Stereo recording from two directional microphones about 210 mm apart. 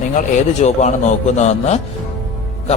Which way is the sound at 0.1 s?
35° left (ahead or behind).